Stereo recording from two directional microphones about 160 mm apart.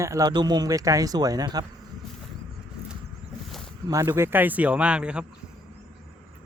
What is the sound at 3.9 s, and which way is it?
Speech, 20° right (ahead or behind).